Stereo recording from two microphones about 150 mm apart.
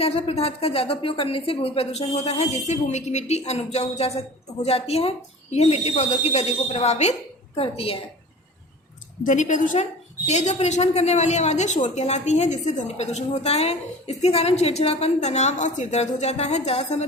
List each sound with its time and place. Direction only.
0.0 s a woman's voice: 40° left (ahead or behind)
9.2 s a woman's voice: 55° left (ahead or behind)